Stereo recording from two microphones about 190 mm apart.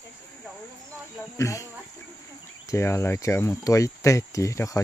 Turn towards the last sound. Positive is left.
turn(degrees=15)  # may be behind; listen again after turning